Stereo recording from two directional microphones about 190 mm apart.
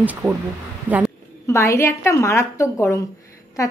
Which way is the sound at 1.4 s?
15° left (ahead or behind).